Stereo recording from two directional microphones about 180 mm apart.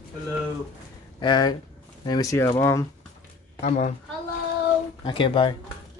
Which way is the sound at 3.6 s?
40° left (ahead or behind).